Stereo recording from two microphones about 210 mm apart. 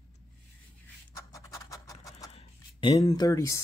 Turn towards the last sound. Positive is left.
turn(degrees=15)  # may be behind; listen again after turning